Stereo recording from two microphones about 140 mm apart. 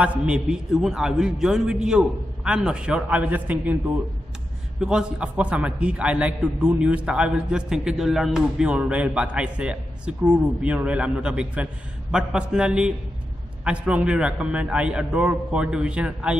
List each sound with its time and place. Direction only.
0.0 s a man's voice: 10° right (ahead or behind)
4.7 s a man's voice: 5° right (ahead or behind)